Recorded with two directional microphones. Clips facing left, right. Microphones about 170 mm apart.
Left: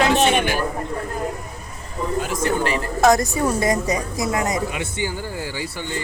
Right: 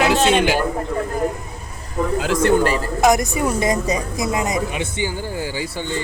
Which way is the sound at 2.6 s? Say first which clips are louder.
Right 3 dB; 40° right (ahead or behind).